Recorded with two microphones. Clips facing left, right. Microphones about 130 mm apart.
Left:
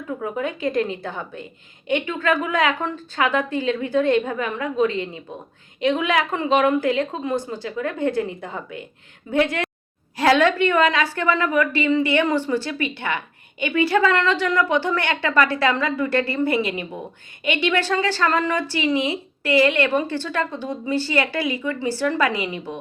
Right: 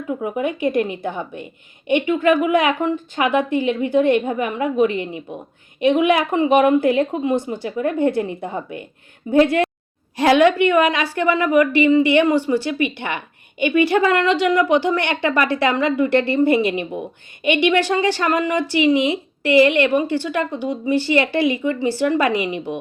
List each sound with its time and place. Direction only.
0.2 s a woman's voice: 20° right (ahead or behind)
10.2 s a woman's voice: 15° right (ahead or behind)